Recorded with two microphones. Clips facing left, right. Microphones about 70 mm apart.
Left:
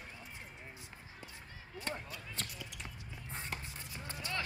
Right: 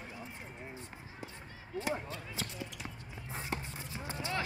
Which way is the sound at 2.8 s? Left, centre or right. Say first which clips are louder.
Right 3 dB; centre.